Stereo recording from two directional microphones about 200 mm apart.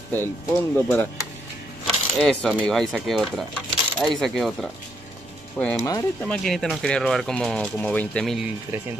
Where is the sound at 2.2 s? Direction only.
5° left (ahead or behind).